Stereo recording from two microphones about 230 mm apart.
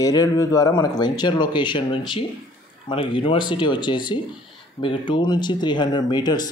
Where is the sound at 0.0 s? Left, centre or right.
Centre.